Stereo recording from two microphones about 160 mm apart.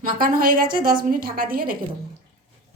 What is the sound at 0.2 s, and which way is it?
A woman's voice, 60° right (ahead or behind).